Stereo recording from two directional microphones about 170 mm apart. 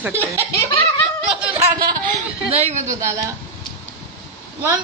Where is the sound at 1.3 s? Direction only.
5° right (ahead or behind).